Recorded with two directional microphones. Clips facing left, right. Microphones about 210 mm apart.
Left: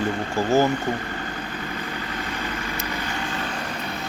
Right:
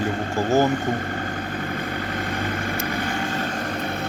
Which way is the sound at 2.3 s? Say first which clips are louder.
Right 4 dB; 50° right (ahead or behind).